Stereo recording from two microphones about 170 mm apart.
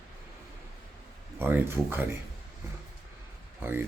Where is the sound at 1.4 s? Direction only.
10° right (ahead or behind).